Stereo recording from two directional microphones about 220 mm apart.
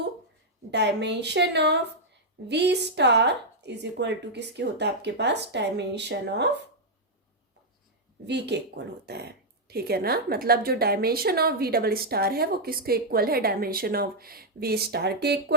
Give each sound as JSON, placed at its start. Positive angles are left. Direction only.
{"t": 0.7, "sound": "a woman's voice", "side_deg": -50}
{"t": 8.3, "sound": "a woman's voice", "side_deg": -50}